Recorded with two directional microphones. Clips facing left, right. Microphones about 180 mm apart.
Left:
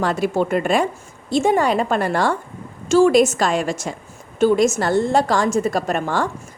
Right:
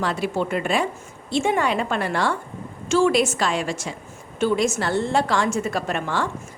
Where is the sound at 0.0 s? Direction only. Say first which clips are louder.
Left 4 dB; 45° left (ahead or behind).